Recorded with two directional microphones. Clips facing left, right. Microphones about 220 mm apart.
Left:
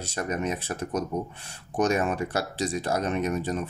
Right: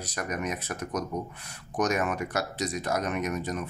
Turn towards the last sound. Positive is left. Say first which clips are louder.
# left 3 dB
turn(degrees=30)  # may be behind; listen again after turning